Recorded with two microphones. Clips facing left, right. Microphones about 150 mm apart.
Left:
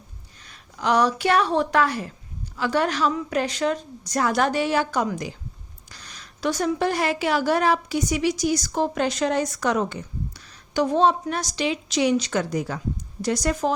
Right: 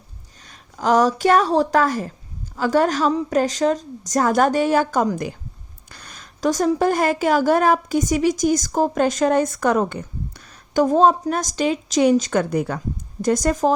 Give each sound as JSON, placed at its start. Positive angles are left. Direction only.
{"t": 0.4, "sound": "a woman's voice", "side_deg": -40}